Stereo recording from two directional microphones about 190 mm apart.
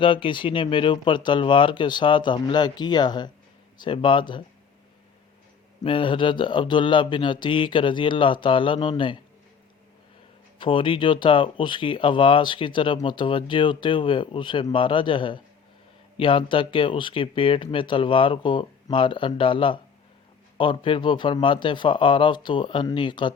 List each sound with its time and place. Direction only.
0.0 s speech: 25° left (ahead or behind)
5.8 s speech: 25° left (ahead or behind)
10.6 s speech: 25° left (ahead or behind)